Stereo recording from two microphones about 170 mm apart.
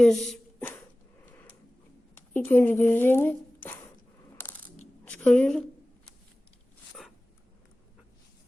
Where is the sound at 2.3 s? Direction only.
10° left (ahead or behind).